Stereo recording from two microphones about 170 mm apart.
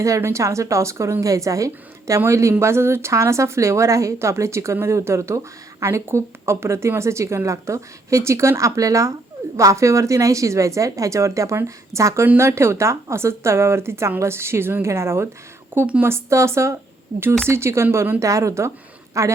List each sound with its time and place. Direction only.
0.0 s speech: 15° right (ahead or behind)
17.1 s speech: 40° right (ahead or behind)
17.5 s speech: 15° right (ahead or behind)